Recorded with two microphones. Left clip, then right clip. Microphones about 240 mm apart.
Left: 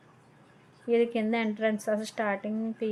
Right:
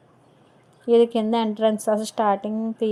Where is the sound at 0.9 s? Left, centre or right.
Right.